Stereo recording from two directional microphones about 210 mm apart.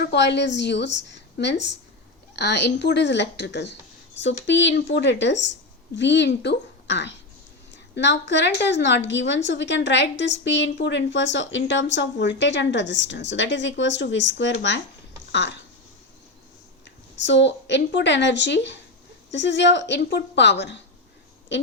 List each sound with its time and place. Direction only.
0.0 s a woman's voice: 55° left (ahead or behind)
15.3 s a sound: 55° left (ahead or behind)
17.2 s a woman's voice: 60° left (ahead or behind)